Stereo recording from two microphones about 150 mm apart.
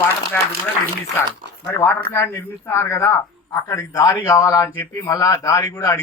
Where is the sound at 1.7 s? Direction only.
20° left (ahead or behind).